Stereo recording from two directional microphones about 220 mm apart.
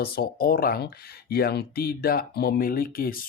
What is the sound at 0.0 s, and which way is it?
Speech, 45° left (ahead or behind).